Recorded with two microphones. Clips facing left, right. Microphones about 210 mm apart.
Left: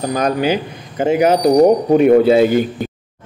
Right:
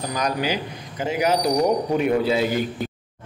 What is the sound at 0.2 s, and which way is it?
A man's voice, 55° left (ahead or behind).